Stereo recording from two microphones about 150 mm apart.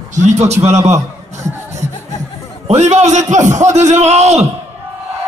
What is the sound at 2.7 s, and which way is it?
A man's voice, 50° right (ahead or behind).